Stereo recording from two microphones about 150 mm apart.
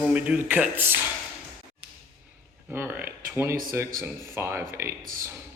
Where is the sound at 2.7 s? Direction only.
15° right (ahead or behind).